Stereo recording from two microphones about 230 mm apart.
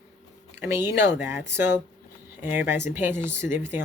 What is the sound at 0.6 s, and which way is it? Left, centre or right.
Speech, centre.